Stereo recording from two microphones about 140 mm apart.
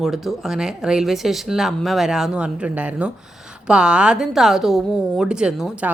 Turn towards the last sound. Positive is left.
turn(degrees=-5)  # may be behind; listen again after turning